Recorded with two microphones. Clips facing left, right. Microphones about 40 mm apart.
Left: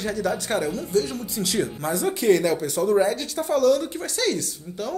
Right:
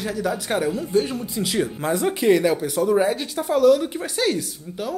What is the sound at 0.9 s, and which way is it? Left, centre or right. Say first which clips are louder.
Speech: even; right.